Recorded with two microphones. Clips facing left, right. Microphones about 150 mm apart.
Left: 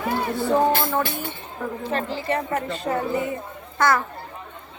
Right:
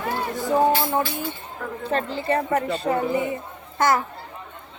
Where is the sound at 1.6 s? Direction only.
10° left (ahead or behind).